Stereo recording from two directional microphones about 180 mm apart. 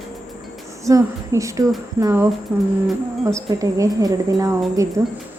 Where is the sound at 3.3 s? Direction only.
20° right (ahead or behind).